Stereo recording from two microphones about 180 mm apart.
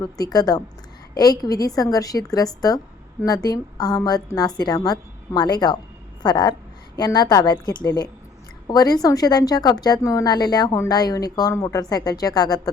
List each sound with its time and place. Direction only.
0.0 s a woman's voice: 20° left (ahead or behind)